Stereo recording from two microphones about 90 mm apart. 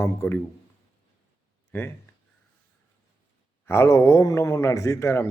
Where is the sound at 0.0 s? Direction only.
30° left (ahead or behind).